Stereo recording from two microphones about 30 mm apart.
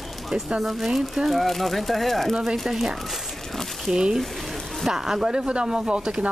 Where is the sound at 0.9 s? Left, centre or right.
Centre.